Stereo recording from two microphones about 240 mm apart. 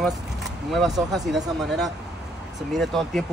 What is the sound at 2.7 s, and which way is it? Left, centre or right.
Speech, centre.